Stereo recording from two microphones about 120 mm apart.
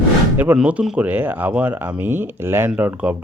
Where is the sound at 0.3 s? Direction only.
10° right (ahead or behind).